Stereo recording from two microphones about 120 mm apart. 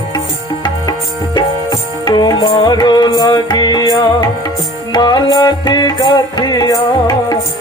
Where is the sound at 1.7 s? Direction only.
35° left (ahead or behind).